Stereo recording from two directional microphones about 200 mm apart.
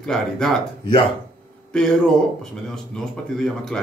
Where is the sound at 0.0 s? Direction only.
5° left (ahead or behind).